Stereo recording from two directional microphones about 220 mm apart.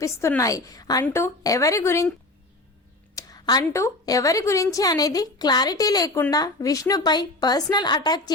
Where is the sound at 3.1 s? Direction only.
20° left (ahead or behind).